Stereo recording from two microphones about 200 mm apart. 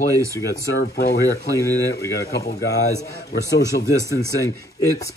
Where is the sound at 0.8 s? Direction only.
50° left (ahead or behind).